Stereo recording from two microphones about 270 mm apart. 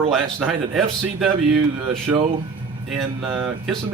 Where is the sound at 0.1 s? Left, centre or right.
Centre.